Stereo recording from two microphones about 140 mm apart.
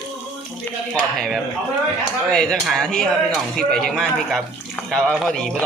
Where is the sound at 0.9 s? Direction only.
5° left (ahead or behind).